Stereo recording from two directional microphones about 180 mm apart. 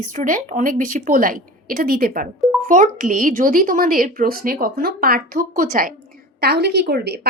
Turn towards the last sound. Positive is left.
turn(degrees=-65)  # may be behind; listen again after turning